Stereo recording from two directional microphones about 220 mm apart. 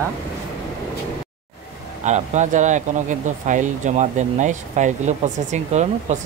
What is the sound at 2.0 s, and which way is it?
Speech, 30° right (ahead or behind).